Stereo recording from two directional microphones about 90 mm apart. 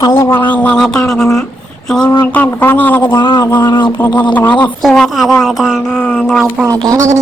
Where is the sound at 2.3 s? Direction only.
20° left (ahead or behind).